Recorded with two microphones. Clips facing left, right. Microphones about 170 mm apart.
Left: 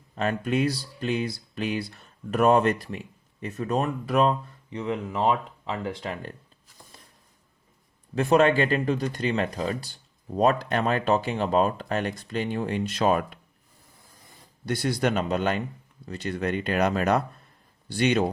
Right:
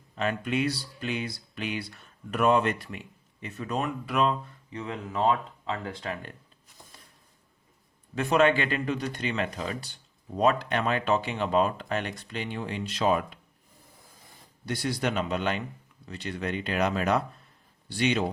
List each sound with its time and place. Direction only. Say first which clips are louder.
0.2 s speech: left 3 dB; 40° left (ahead or behind)
5.2 s speech: even; 20° left (ahead or behind)
8.1 s speech: left 3 dB; 35° left (ahead or behind)
14.7 s speech: left 4 dB; 50° left (ahead or behind)